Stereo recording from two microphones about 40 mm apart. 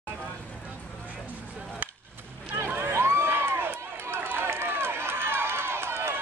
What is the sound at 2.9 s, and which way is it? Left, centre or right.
Run, right.